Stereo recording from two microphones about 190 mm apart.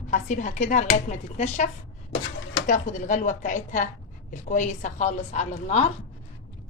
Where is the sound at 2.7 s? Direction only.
40° left (ahead or behind).